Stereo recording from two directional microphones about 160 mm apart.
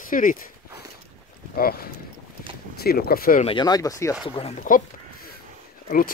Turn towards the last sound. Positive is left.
turn(degrees=60)  # may be behind; listen again after turning